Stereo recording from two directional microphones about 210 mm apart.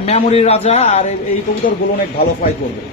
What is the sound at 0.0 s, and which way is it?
A man's voice, 30° left (ahead or behind).